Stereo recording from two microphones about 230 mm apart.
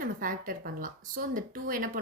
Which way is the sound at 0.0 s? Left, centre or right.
Right.